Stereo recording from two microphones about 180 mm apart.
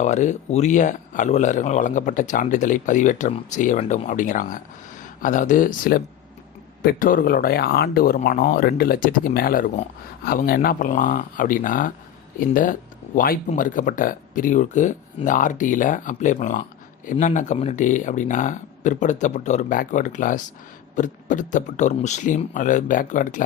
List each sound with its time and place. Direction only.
0.0 s speech: 40° left (ahead or behind)